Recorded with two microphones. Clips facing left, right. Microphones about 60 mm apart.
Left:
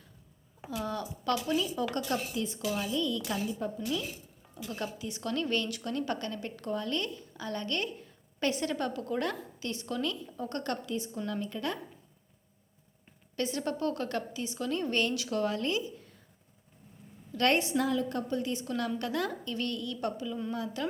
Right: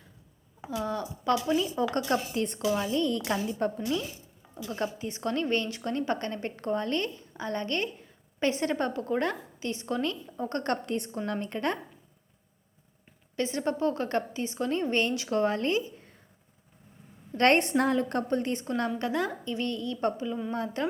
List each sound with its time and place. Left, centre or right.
1.2 s a woman's voice: right
2.3 s a woman's voice: right
3.3 s a woman's voice: right
4.5 s a woman's voice: right
13.3 s a woman's voice: right
17.3 s a woman's voice: right
18.9 s a woman's voice: right